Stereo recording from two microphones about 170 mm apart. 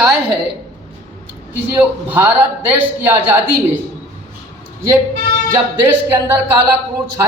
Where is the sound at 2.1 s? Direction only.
10° right (ahead or behind).